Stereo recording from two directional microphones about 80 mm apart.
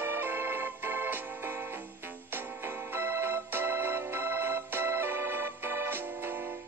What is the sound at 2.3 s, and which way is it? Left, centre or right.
Organ, right.